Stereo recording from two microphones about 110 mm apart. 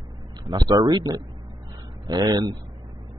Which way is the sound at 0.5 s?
35° right (ahead or behind).